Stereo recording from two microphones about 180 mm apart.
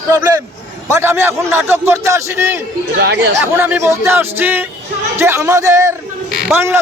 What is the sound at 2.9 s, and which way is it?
Speech, 65° right (ahead or behind).